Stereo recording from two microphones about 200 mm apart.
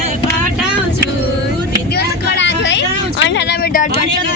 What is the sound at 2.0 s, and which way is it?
Vehicle, 60° left (ahead or behind).